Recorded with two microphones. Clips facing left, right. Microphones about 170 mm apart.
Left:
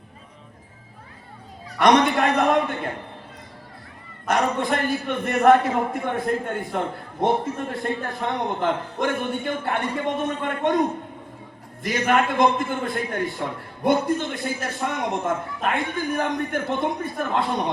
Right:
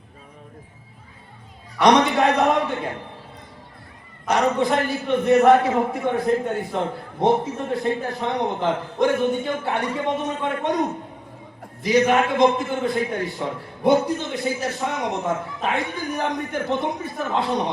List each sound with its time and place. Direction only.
1.8 s a man's voice: 55° left (ahead or behind)
4.3 s a man's voice: 55° left (ahead or behind)
11.8 s a man's voice: 50° left (ahead or behind)